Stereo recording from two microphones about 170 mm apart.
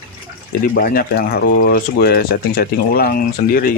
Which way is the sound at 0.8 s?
60° left (ahead or behind).